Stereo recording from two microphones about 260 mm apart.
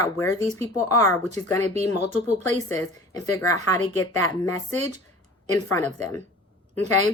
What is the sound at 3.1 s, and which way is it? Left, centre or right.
Speech, centre.